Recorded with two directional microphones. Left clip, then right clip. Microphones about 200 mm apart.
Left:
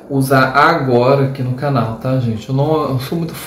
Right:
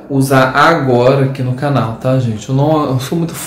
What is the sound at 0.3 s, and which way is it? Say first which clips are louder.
Speech: right 2 dB; 5° left (ahead or behind).